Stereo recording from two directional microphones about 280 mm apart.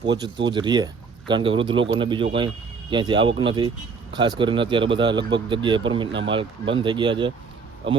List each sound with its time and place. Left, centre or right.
0.0 s speech: centre